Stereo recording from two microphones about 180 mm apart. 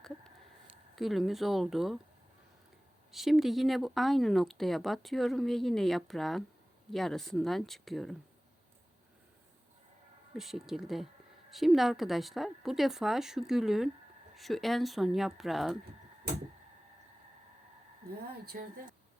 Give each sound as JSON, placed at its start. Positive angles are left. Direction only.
{"t": 0.9, "sound": "speech", "side_deg": 0}
{"t": 3.1, "sound": "speech", "side_deg": 0}
{"t": 10.3, "sound": "speech", "side_deg": 0}
{"t": 18.5, "sound": "speech", "side_deg": -60}